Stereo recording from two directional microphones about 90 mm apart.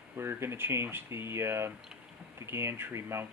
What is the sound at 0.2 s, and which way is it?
Speech, 25° right (ahead or behind).